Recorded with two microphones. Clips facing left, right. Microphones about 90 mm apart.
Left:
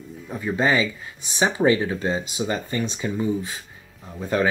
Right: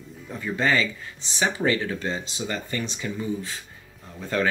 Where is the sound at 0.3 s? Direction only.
20° left (ahead or behind).